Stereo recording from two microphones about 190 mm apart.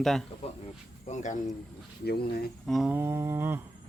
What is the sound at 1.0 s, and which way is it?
Speech, 40° left (ahead or behind).